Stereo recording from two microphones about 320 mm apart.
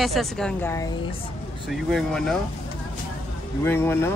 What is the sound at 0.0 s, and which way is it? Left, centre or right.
Speech, centre.